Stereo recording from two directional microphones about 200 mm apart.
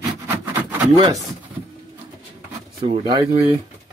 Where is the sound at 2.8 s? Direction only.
25° right (ahead or behind).